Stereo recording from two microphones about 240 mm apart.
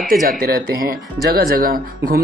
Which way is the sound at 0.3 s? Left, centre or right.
Right.